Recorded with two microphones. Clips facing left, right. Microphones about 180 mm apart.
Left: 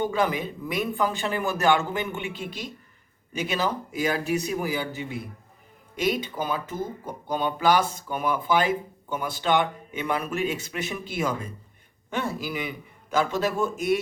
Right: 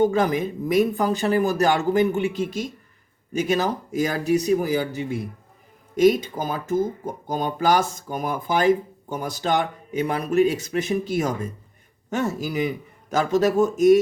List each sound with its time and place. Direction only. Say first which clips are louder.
0.0 s speech: right 5 dB; 45° right (ahead or behind)